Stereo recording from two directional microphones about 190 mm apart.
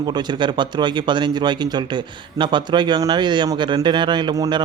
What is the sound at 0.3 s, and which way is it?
Speech, 25° right (ahead or behind).